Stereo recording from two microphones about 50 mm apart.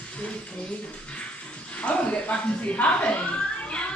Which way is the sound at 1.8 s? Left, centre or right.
Left.